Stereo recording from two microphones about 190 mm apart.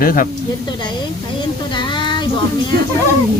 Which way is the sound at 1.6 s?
25° left (ahead or behind).